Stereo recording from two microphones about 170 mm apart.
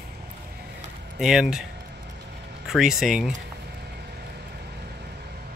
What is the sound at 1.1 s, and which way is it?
Speech, 5° right (ahead or behind).